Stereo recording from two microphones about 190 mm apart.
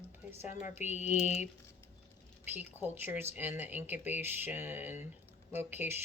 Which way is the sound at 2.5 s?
10° right (ahead or behind).